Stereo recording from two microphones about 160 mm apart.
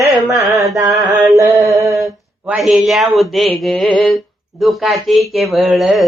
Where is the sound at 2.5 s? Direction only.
Centre (ahead or behind).